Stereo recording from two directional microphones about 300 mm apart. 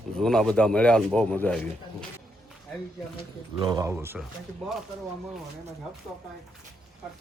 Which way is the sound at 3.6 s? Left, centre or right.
Centre.